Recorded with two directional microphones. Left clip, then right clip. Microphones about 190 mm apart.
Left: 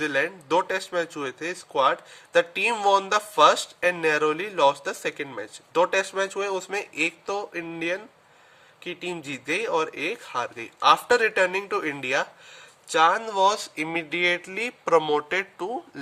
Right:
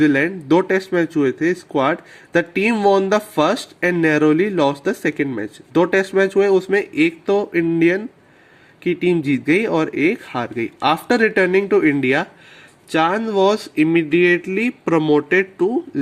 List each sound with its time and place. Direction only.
0.0 s speech: 20° right (ahead or behind)